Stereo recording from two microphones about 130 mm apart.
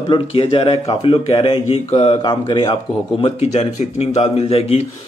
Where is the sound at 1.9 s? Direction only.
55° left (ahead or behind).